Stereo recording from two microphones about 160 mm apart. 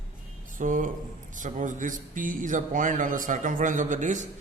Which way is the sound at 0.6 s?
55° right (ahead or behind).